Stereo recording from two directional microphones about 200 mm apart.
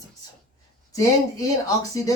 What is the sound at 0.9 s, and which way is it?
Speech, 15° left (ahead or behind).